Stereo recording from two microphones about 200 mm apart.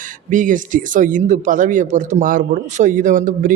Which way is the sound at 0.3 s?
40° right (ahead or behind).